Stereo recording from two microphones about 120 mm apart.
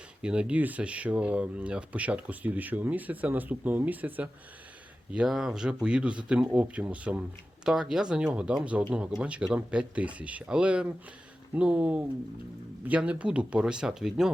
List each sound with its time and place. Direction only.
0.2 s speech: 10° right (ahead or behind)